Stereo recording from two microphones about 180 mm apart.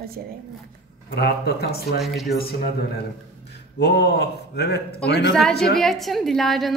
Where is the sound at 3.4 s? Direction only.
65° left (ahead or behind).